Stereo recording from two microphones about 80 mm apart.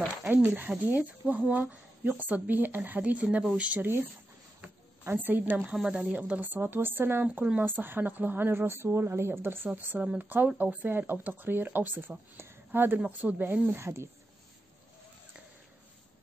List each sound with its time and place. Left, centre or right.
0.3 s speech: right
5.0 s speech: right
7.2 s speech: centre
9.7 s speech: centre; by 14.0 s right